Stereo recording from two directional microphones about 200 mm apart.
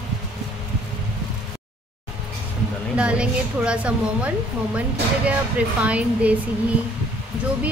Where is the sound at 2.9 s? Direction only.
5° right (ahead or behind).